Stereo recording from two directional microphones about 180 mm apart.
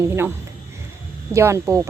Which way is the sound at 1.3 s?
15° right (ahead or behind).